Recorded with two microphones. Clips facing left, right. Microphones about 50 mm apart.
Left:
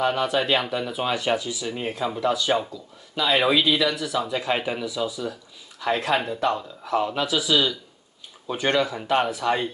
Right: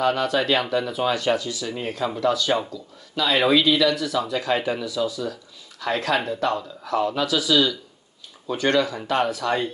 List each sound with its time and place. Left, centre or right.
0.0 s speech: centre